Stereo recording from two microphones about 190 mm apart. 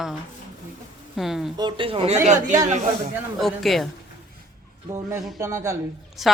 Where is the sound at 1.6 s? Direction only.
25° right (ahead or behind).